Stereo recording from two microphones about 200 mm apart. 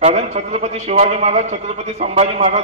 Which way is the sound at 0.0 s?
35° right (ahead or behind).